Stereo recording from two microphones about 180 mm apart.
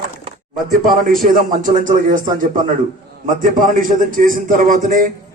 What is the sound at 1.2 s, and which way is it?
A man's voice, 50° right (ahead or behind).